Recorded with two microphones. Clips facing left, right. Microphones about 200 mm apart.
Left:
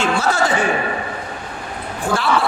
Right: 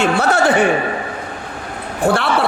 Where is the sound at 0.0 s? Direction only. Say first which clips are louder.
Right 4 dB; 60° right (ahead or behind).